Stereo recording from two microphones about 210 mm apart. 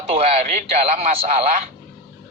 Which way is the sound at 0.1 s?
30° right (ahead or behind).